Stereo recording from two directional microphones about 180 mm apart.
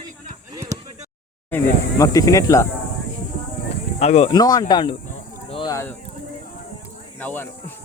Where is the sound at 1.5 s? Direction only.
15° left (ahead or behind).